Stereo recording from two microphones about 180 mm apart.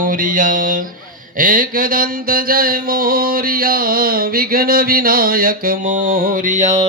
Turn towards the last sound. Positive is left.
turn(degrees=-40)  # may be behind; listen again after turning